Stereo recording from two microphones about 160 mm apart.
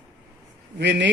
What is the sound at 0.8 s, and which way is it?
Speech, 90° right.